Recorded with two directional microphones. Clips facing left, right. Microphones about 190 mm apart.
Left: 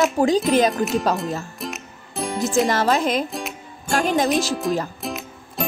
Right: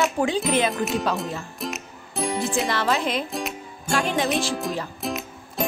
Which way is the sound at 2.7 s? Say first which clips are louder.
Left 4 dB; 45° left (ahead or behind).